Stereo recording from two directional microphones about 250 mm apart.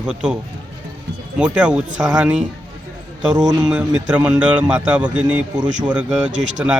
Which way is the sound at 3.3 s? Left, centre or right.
Centre.